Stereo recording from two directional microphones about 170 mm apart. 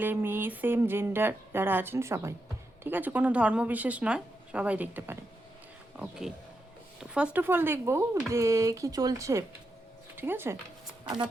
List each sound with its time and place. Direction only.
0.0 s speech: 10° right (ahead or behind)